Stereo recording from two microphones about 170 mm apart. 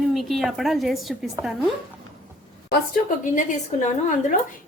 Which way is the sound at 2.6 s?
55° left (ahead or behind).